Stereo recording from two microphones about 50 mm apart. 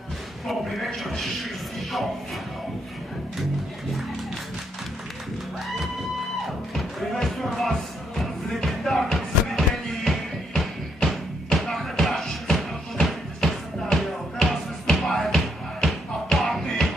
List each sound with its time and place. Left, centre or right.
0.5 s a man's voice: centre
6.7 s music: centre